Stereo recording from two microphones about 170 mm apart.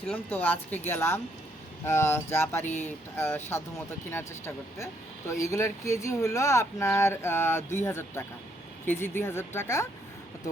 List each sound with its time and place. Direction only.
0.1 s speech: 10° left (ahead or behind)